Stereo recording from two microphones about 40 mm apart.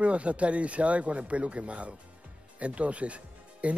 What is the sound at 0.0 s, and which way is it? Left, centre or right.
Speech, right.